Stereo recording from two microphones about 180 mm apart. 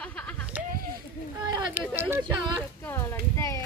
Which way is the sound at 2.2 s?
25° right (ahead or behind).